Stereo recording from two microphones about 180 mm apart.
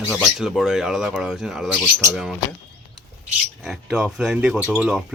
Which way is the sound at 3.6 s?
Centre (ahead or behind).